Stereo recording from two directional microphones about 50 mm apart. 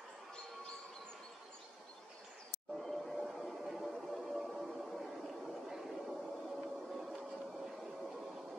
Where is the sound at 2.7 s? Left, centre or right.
Centre.